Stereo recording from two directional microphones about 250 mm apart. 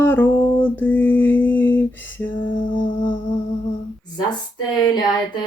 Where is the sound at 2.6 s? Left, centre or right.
Centre.